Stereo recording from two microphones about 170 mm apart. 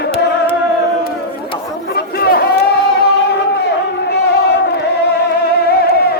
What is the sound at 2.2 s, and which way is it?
Chatter, 70° left (ahead or behind).